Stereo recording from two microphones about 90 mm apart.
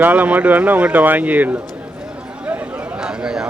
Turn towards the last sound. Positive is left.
turn(degrees=-10)  # may be behind; listen again after turning